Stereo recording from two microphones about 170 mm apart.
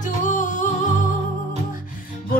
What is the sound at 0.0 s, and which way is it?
Music, 45° left (ahead or behind).